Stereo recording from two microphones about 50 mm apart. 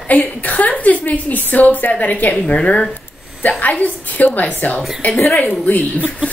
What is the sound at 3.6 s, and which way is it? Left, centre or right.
A woman's voice, left.